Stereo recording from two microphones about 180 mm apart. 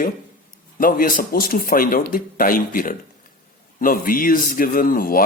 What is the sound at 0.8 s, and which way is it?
A man's voice, 50° left (ahead or behind).